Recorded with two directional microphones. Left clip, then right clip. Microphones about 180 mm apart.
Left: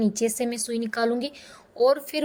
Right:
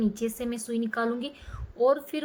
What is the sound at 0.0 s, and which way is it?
A woman's voice, 35° left (ahead or behind).